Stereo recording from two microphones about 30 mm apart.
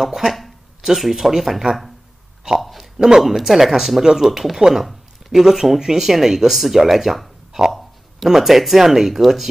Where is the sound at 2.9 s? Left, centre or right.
Right.